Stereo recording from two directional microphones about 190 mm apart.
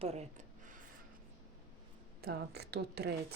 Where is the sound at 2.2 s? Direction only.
55° right (ahead or behind).